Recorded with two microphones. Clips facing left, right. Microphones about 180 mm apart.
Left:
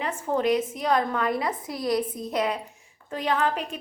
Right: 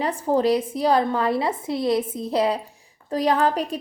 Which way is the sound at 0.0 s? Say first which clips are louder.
Right 5 dB; 35° right (ahead or behind).